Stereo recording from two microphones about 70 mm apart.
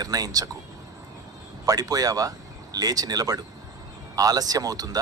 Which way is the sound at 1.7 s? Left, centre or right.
Right.